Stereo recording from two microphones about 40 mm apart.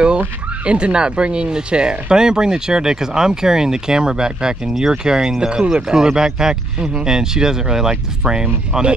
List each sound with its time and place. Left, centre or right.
0.7 s speech: right